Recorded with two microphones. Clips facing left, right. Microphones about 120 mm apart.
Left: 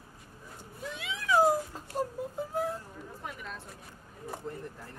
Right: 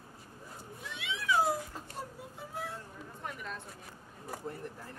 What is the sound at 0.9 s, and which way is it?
Cat, 40° left (ahead or behind).